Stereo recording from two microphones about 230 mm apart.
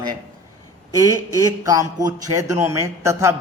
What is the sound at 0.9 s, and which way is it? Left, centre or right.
Speech, centre.